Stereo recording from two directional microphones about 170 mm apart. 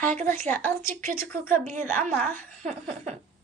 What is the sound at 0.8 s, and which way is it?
A woman's voice, 55° right (ahead or behind).